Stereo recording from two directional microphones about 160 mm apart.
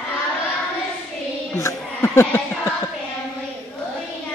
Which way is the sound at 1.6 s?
20° left (ahead or behind).